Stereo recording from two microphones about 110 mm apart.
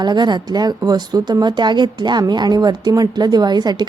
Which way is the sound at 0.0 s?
40° right (ahead or behind).